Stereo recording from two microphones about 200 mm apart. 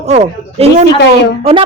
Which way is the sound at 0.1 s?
35° right (ahead or behind).